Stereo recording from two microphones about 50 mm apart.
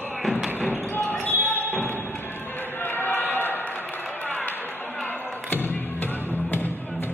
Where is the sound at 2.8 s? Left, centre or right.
Left.